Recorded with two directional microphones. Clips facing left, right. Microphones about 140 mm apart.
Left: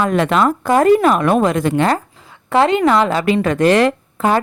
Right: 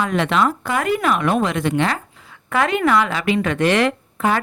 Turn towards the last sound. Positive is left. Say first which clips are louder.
# left 3 dB
turn(degrees=35)  # may be behind; listen again after turning